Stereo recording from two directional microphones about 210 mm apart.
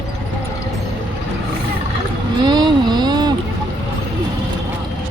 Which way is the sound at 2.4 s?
20° right (ahead or behind).